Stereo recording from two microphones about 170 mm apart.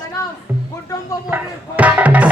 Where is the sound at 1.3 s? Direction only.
10° right (ahead or behind).